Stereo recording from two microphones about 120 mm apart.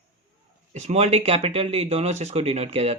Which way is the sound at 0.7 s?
70° right (ahead or behind).